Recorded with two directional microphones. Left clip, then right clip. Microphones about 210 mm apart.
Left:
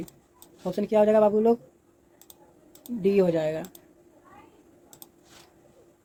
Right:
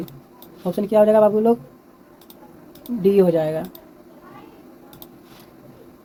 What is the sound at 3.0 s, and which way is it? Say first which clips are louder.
Speech: right 6 dB; 25° left (ahead or behind).